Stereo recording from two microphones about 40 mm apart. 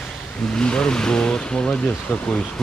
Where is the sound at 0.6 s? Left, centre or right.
Centre.